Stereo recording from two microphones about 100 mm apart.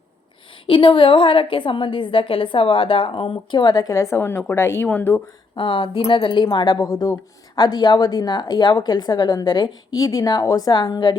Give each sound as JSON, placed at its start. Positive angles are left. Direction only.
{"t": 0.7, "sound": "a woman's voice", "side_deg": 60}
{"t": 5.5, "sound": "a woman's voice", "side_deg": 60}
{"t": 6.7, "sound": "a woman's voice", "side_deg": 35}